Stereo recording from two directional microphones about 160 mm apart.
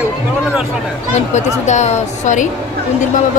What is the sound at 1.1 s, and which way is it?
A woman's voice, 45° left (ahead or behind).